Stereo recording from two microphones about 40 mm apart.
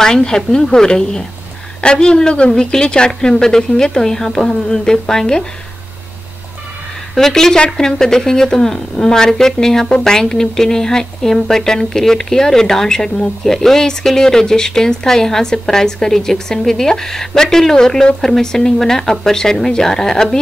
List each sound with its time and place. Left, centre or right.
0.0 s speech: centre
7.2 s speech: centre